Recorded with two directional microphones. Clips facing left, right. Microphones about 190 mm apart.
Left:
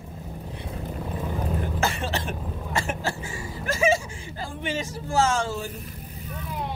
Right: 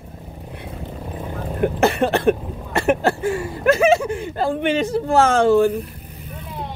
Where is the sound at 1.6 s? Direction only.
60° right (ahead or behind).